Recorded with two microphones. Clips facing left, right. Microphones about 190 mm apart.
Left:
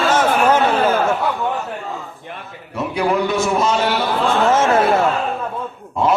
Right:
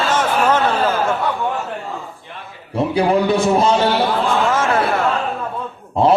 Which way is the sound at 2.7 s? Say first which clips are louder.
Right 3 dB; 30° right (ahead or behind).